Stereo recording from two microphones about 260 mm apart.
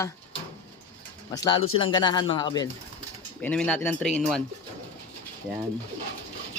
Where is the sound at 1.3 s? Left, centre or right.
Centre.